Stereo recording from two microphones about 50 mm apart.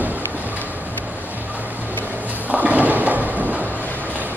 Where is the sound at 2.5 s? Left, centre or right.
Right.